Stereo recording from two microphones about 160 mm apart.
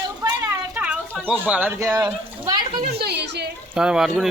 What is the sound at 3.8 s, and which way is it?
Speech, 5° right (ahead or behind).